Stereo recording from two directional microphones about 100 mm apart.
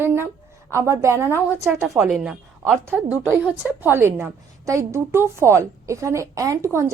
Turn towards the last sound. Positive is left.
turn(degrees=-30)  # may be behind; listen again after turning